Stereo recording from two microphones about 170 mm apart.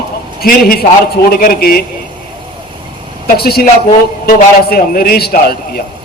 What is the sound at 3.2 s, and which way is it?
A man's voice, 65° left (ahead or behind).